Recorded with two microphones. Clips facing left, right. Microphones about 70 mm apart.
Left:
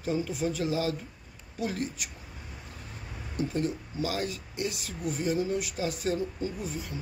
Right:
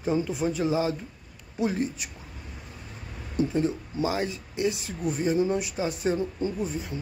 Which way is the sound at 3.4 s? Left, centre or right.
Right.